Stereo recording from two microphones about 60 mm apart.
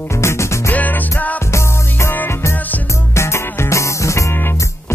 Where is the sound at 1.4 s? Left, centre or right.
Left.